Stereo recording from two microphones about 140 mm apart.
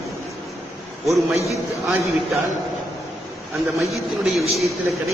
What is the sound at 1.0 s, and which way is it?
Speech, centre (ahead or behind).